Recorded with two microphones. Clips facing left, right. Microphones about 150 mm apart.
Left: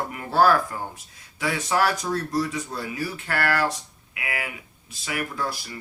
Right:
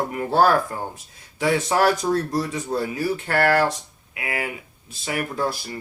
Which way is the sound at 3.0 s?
30° right (ahead or behind).